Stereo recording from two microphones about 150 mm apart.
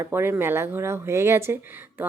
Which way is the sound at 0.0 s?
15° right (ahead or behind).